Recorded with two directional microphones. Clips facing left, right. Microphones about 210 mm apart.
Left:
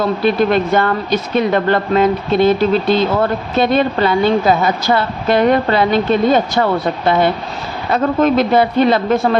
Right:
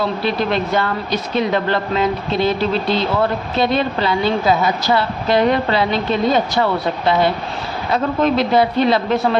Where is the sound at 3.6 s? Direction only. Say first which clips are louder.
Left 4 dB; 50° left (ahead or behind).